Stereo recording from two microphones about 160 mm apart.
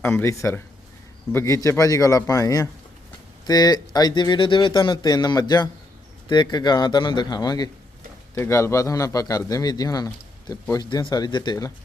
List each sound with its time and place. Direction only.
0.0 s a man's voice: 15° left (ahead or behind)